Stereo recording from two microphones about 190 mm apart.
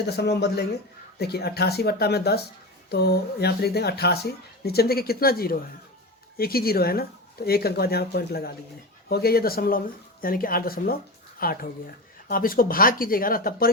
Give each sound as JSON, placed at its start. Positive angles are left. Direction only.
{"t": 0.0, "sound": "speech", "side_deg": 60}